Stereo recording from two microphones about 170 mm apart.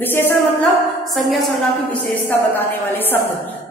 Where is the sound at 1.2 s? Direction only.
Centre (ahead or behind).